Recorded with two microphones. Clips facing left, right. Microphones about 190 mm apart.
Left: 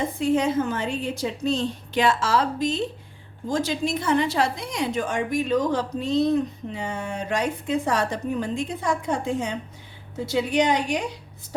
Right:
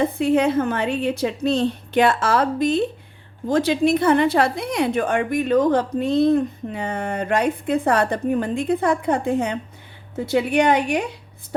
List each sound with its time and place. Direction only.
0.0 s a woman's voice: 65° right (ahead or behind)